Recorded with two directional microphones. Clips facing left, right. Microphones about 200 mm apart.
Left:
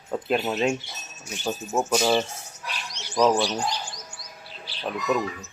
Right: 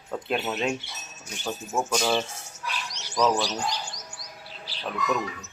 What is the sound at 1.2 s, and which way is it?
Speech, 10° left (ahead or behind).